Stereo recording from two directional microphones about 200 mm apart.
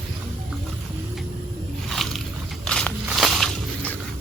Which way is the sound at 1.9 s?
Centre (ahead or behind).